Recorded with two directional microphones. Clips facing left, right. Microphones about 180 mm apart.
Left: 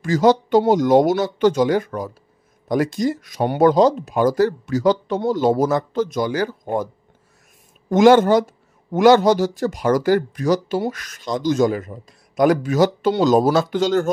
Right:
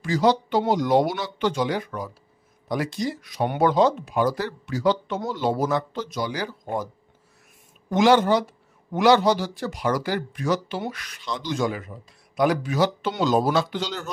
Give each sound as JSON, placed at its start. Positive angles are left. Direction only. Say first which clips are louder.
{"t": 0.0, "sound": "speech", "louder": "left 5 dB", "side_deg": 45}
{"t": 7.9, "sound": "speech", "louder": "left 6 dB", "side_deg": 50}